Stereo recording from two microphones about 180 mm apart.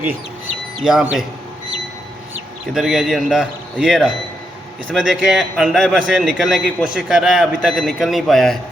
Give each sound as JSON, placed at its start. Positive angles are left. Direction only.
{"t": 0.9, "sound": "a man's voice", "side_deg": -5}
{"t": 2.7, "sound": "a man's voice", "side_deg": 0}